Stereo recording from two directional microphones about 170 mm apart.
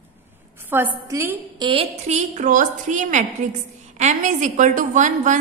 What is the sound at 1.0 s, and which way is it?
Speech, 15° right (ahead or behind).